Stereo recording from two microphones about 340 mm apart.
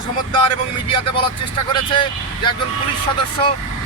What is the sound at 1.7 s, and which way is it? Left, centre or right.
Speech, centre.